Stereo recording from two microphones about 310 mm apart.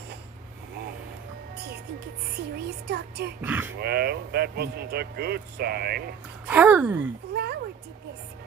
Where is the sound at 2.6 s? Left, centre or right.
Right.